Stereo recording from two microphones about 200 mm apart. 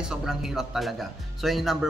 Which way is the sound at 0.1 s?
5° right (ahead or behind).